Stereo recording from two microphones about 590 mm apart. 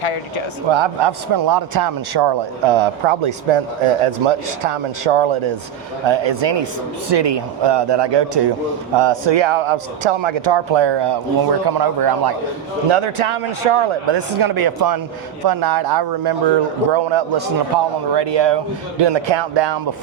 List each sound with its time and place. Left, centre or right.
0.0 s speech: left
0.7 s a man's voice: right
2.6 s a man's voice: right
12.9 s a man's voice: right
14.2 s a man's voice: right